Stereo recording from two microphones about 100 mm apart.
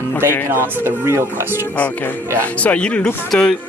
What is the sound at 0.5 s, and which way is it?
Speech, 25° right (ahead or behind).